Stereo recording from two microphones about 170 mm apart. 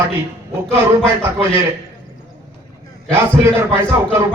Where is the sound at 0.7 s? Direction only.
15° right (ahead or behind).